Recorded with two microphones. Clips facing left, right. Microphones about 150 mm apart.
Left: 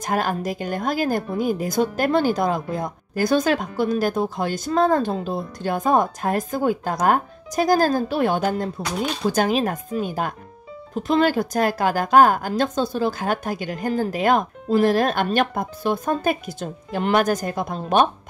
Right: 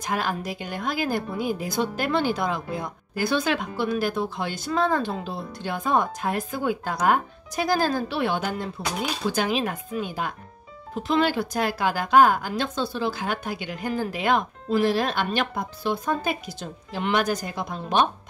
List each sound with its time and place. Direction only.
0.0 s a woman's voice: 45° left (ahead or behind)